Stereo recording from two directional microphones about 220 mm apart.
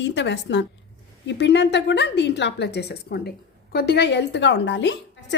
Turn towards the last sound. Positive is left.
turn(degrees=55)  # may be behind; listen again after turning